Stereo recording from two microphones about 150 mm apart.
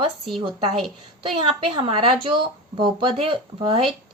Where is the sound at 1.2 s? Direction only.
35° right (ahead or behind).